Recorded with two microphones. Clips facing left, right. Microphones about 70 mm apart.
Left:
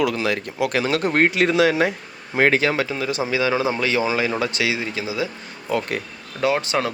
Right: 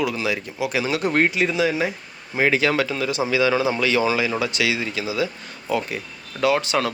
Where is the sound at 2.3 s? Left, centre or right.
Left.